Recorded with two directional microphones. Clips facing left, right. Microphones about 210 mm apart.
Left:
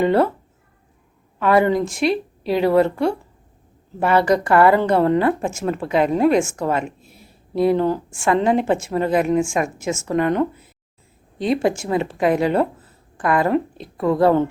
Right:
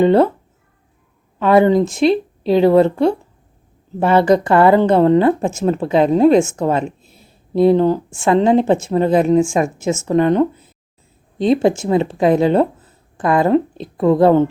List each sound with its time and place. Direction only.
0.0 s speech: 25° right (ahead or behind)
1.4 s speech: 25° right (ahead or behind)